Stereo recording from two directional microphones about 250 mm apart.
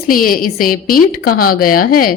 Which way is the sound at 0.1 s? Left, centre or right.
Left.